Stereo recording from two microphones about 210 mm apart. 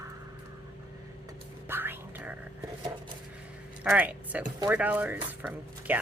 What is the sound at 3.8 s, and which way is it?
Speech, 5° right (ahead or behind).